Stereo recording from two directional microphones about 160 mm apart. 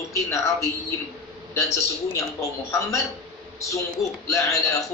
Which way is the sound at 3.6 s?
20° left (ahead or behind).